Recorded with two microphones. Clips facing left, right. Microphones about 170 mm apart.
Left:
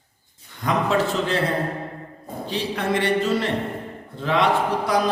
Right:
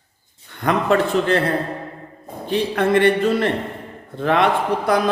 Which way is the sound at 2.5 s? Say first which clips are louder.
Right 6 dB; 55° right (ahead or behind).